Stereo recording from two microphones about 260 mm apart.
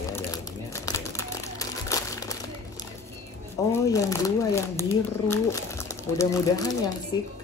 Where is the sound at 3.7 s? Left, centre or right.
Centre.